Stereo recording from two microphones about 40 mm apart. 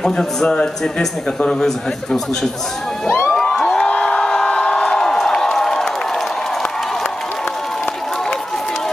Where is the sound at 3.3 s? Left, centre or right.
Centre.